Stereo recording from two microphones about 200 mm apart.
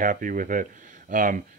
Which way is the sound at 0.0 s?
40° right (ahead or behind).